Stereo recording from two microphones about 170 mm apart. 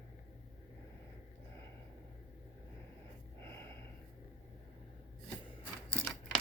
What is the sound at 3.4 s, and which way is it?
Snort, 15° left (ahead or behind).